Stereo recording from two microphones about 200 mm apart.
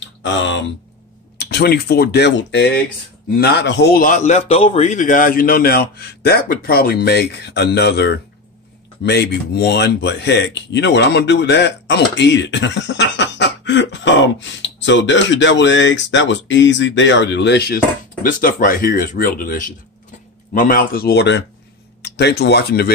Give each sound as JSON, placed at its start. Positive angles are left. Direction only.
{"t": 0.2, "sound": "a man's voice", "side_deg": 65}
{"t": 18.2, "sound": "a man's voice", "side_deg": 45}